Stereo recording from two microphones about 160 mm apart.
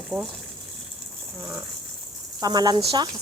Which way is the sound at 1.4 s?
10° right (ahead or behind).